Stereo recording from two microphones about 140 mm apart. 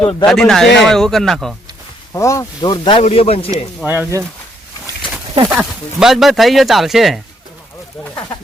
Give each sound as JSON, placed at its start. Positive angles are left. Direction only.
{"t": 0.0, "sound": "speech", "side_deg": 45}
{"t": 0.3, "sound": "speech", "side_deg": 5}
{"t": 2.1, "sound": "speech", "side_deg": 20}
{"t": 3.0, "sound": "speech", "side_deg": 45}
{"t": 3.8, "sound": "speech", "side_deg": -10}
{"t": 5.5, "sound": "speech", "side_deg": -5}